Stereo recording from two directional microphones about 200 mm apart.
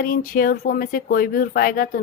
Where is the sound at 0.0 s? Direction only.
45° left (ahead or behind).